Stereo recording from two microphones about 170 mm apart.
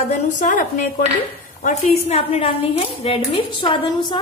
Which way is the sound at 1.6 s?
40° left (ahead or behind).